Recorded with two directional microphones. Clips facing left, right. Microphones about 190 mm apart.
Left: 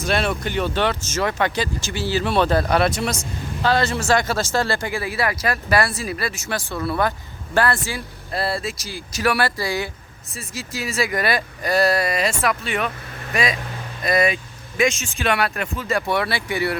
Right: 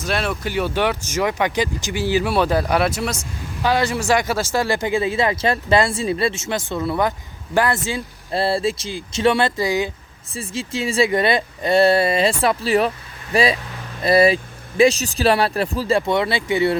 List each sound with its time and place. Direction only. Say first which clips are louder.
0.0 s speech: left 1 dB; centre (ahead or behind); by 9.9 s 20° right (ahead or behind)
10.3 s speech: right 5 dB; 30° right (ahead or behind)